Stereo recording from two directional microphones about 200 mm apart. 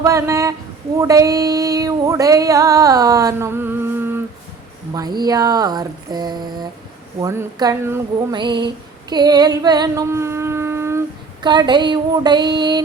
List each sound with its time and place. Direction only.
0.0 s speech: 15° right (ahead or behind)